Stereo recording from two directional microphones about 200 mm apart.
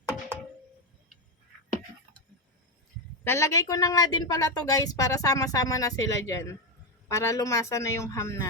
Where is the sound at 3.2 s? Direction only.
15° left (ahead or behind).